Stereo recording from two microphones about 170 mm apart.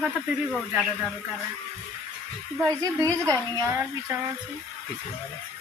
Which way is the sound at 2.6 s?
20° right (ahead or behind).